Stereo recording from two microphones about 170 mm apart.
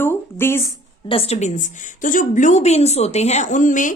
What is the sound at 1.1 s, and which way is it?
A woman's voice, 35° left (ahead or behind).